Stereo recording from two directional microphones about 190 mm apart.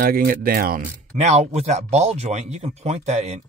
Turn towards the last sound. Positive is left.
turn(degrees=-35)  # may be behind; listen again after turning